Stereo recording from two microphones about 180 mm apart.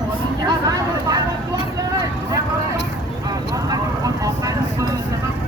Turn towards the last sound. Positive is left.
turn(degrees=-20)  # may be behind; listen again after turning